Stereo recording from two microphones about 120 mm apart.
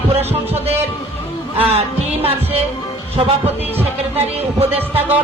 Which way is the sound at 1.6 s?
55° right (ahead or behind).